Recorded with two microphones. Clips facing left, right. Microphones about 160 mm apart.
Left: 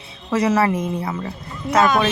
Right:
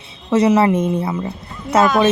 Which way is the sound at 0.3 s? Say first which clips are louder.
Right 4 dB; 25° right (ahead or behind).